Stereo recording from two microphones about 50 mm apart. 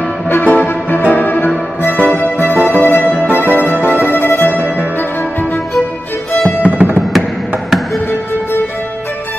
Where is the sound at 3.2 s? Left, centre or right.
Right.